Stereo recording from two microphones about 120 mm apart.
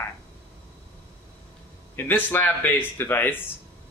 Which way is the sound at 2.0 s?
15° left (ahead or behind).